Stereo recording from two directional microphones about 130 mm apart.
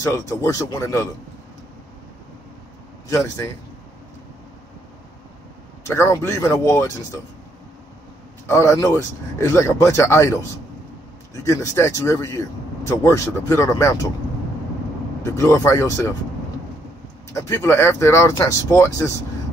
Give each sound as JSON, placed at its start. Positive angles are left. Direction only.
{"t": 0.0, "sound": "speech", "side_deg": 20}
{"t": 3.1, "sound": "speech", "side_deg": 25}
{"t": 5.9, "sound": "speech", "side_deg": 20}
{"t": 8.5, "sound": "speech", "side_deg": 20}
{"t": 11.4, "sound": "speech", "side_deg": 25}
{"t": 15.3, "sound": "speech", "side_deg": 20}
{"t": 17.3, "sound": "speech", "side_deg": 20}